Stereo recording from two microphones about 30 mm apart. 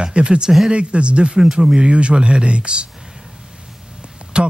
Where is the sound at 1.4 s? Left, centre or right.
Centre.